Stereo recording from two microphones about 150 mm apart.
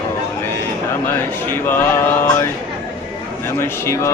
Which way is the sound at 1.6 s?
15° left (ahead or behind).